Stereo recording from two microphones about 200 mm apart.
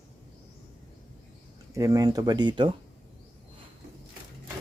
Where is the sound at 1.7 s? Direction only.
15° right (ahead or behind).